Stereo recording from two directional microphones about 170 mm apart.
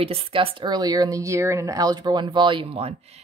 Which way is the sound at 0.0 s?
35° right (ahead or behind).